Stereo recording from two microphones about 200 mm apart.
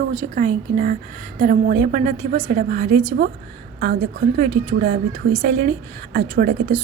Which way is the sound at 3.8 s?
45° right (ahead or behind).